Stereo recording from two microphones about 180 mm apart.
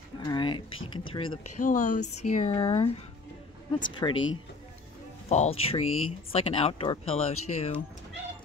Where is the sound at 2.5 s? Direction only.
25° left (ahead or behind).